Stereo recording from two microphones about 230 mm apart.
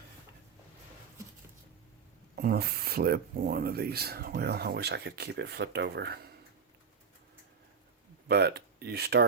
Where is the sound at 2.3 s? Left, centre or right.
Right.